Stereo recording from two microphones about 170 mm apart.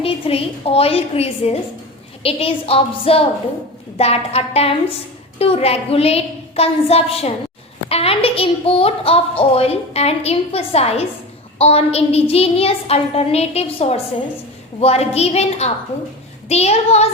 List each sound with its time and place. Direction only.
0.0 s a woman's voice: 35° left (ahead or behind)